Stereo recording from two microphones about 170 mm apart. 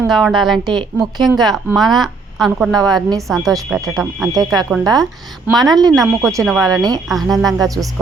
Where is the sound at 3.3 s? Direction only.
Centre (ahead or behind).